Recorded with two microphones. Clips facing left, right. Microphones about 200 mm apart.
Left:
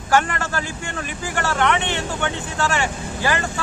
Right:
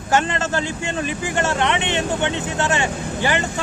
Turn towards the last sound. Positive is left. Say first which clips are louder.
# right 2 dB
turn(degrees=-20)  # may be behind; listen again after turning